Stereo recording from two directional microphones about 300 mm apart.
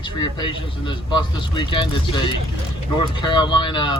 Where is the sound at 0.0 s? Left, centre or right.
Centre.